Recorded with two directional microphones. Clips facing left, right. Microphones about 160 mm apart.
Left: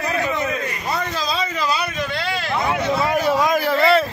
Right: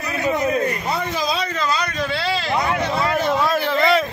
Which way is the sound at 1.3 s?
5° left (ahead or behind).